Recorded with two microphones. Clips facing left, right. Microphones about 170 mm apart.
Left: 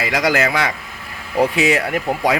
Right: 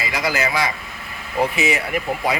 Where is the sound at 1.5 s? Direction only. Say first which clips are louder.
Left 4 dB; 90° left.